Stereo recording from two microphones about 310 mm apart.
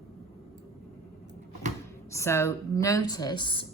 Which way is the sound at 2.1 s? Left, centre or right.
Centre.